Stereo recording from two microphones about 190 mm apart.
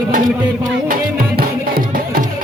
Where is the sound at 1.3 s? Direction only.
50° right (ahead or behind).